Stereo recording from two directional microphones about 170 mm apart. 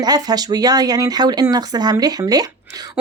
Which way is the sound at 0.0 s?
25° right (ahead or behind).